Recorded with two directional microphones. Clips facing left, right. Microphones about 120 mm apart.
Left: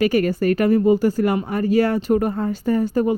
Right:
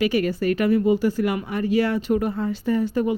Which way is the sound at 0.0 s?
45° left (ahead or behind).